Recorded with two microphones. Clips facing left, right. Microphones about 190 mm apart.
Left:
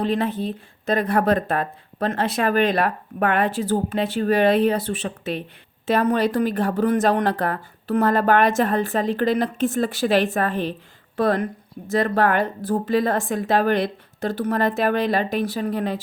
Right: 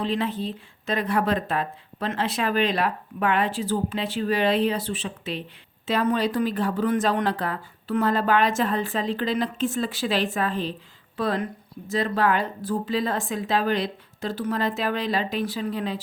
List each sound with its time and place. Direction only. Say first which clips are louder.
0.0 s speech: left 4 dB; 55° left (ahead or behind)
11.9 s speech: left 3 dB; 55° left (ahead or behind)